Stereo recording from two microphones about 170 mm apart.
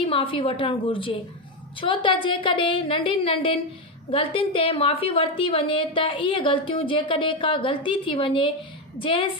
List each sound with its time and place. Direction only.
0.0 s a woman's voice: 30° left (ahead or behind)